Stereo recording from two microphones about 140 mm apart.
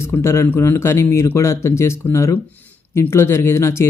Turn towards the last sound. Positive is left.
turn(degrees=20)  # may be behind; listen again after turning